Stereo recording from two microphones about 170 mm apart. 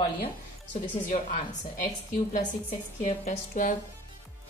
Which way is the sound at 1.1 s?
45° left (ahead or behind).